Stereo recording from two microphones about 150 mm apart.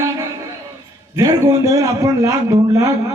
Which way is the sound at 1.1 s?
15° right (ahead or behind).